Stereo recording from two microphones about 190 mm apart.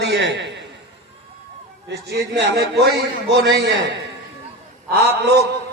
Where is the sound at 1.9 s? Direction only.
60° right (ahead or behind).